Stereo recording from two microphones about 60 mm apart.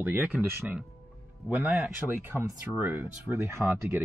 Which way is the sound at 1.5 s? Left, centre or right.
Right.